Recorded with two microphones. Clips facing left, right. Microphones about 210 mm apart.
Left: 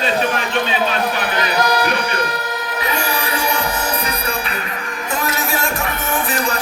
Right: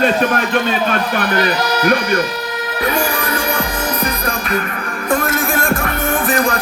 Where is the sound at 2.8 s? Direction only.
50° right (ahead or behind).